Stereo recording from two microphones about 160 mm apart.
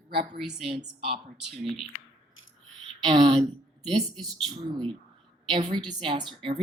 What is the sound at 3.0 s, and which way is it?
Speech, 30° right (ahead or behind).